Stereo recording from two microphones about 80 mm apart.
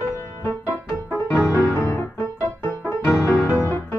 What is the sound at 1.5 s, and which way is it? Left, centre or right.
Piano, left.